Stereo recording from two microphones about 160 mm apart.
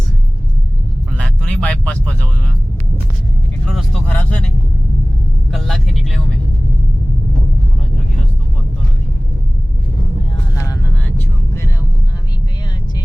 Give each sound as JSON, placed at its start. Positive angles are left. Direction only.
{"t": 1.1, "sound": "a sound", "side_deg": 5}
{"t": 3.7, "sound": "vehicle", "side_deg": 0}
{"t": 10.5, "sound": "vehicle", "side_deg": 20}